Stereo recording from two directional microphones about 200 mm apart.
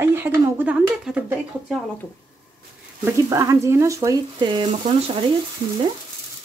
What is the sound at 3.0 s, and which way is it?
Speech, 15° right (ahead or behind).